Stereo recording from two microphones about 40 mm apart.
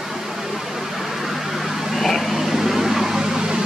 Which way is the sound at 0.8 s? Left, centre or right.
Centre.